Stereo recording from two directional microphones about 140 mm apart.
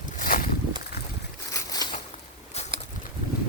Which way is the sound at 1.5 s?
25° left (ahead or behind).